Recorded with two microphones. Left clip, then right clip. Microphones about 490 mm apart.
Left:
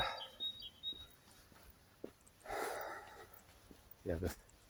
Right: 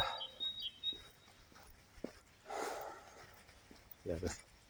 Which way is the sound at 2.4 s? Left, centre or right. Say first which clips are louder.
Left 1 dB; left.